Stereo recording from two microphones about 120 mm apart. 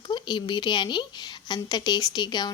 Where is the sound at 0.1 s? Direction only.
40° left (ahead or behind).